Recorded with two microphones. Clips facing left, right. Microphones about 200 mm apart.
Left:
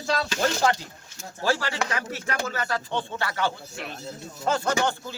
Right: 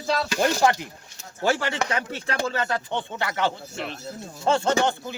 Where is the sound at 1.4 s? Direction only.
20° right (ahead or behind).